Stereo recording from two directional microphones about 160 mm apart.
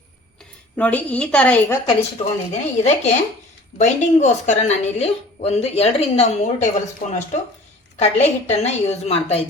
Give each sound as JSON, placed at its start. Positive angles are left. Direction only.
{"t": 0.8, "sound": "a woman's voice", "side_deg": 10}
{"t": 1.9, "sound": "a woman's voice", "side_deg": 40}
{"t": 7.9, "sound": "a woman's voice", "side_deg": 40}